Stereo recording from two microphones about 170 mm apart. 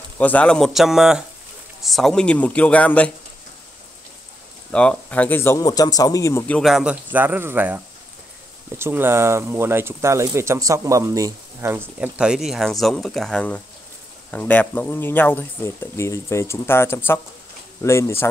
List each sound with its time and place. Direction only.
0.2 s a man's voice: 10° left (ahead or behind)
4.6 s a man's voice: 5° left (ahead or behind)